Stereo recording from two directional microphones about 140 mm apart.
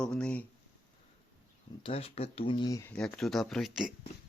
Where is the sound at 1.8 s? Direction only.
45° left (ahead or behind); by 2.9 s 25° left (ahead or behind).